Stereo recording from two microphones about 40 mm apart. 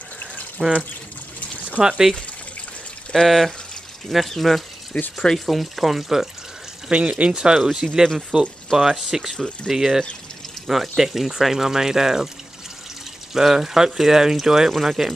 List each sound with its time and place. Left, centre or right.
0.6 s speech: centre
1.8 s speech: right
3.1 s speech: centre
4.9 s speech: left
5.5 s speech: centre
6.9 s speech: right
7.3 s speech: centre
13.3 s speech: centre